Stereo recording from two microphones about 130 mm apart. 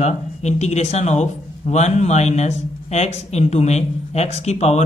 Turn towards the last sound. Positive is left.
turn(degrees=60)  # may be behind; listen again after turning